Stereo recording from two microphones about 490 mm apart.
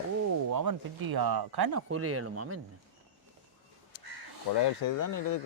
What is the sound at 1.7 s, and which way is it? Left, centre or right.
Speech, right.